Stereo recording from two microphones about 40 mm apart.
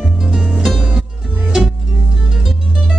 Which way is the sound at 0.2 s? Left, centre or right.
Centre.